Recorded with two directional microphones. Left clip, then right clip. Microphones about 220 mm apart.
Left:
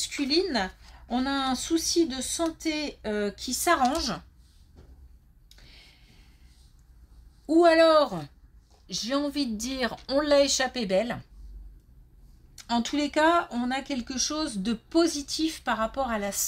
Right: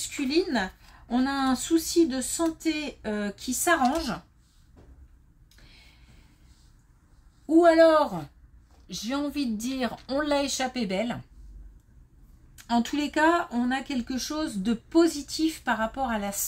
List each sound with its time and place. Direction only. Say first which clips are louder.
0.1 s speech: right 1 dB; 30° left (ahead or behind)
7.4 s speech: right 1 dB; 30° left (ahead or behind)
12.5 s speech: right 1 dB; 25° left (ahead or behind)